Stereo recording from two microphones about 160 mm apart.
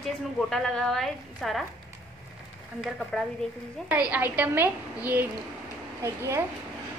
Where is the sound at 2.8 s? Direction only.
Centre (ahead or behind).